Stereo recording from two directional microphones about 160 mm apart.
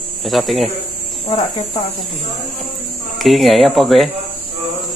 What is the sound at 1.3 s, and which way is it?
Speech, 25° left (ahead or behind).